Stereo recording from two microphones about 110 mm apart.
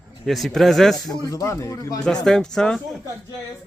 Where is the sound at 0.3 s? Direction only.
Centre (ahead or behind).